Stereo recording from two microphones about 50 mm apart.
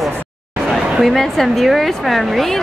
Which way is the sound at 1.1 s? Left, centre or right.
Centre.